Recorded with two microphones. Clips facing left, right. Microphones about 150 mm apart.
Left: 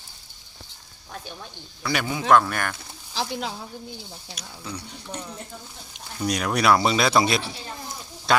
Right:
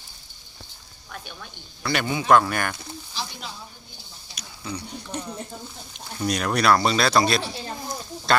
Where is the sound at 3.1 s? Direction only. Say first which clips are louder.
Left 8 dB; 90° left.